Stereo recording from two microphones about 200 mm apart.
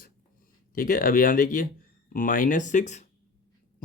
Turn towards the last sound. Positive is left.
turn(degrees=35)  # may be behind; listen again after turning